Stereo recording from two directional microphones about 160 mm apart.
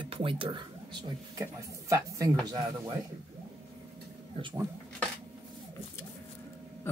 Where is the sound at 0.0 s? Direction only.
35° right (ahead or behind).